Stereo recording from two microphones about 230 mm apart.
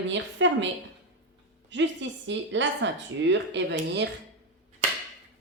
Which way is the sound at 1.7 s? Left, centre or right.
Right.